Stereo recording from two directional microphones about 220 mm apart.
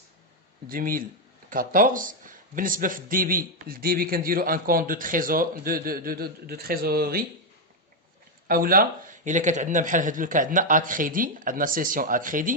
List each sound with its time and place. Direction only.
0.7 s speech: 40° right (ahead or behind)
8.4 s speech: 40° right (ahead or behind)